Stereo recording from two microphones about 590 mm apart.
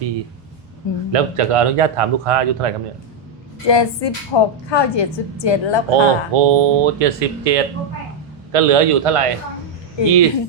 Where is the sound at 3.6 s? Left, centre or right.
Left.